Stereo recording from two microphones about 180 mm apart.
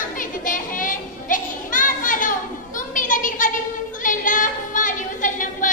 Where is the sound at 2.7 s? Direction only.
45° left (ahead or behind).